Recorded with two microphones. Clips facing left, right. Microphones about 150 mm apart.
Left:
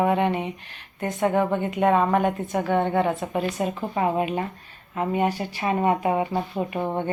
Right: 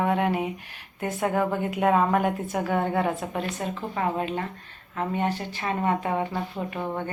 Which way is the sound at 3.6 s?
15° left (ahead or behind).